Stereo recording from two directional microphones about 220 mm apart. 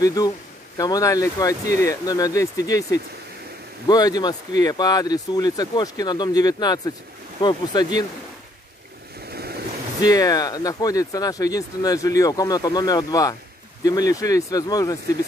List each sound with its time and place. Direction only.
0.0 s speech: 15° left (ahead or behind)
9.3 s waves: 45° right (ahead or behind)
10.0 s speech: 15° left (ahead or behind)